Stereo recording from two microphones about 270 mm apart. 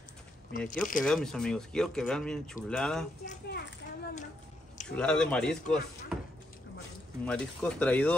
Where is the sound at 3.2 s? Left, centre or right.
Left.